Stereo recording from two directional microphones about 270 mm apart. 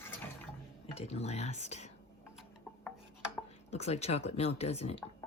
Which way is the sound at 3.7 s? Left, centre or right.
Left.